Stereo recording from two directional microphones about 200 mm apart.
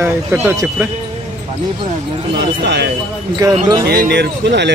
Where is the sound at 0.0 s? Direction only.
10° right (ahead or behind).